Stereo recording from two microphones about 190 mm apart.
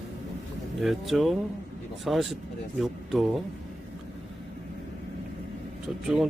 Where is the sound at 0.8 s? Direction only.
Centre (ahead or behind).